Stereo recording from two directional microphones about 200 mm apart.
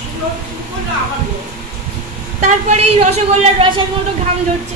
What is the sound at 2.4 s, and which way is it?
A woman's voice, 30° right (ahead or behind).